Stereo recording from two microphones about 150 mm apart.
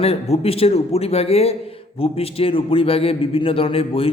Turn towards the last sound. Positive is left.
turn(degrees=40)  # may be behind; listen again after turning